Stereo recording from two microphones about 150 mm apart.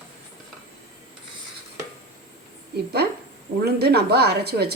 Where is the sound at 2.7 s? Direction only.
90° right.